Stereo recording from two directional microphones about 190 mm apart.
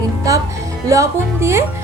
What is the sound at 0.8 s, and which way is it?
Speech, 15° right (ahead or behind).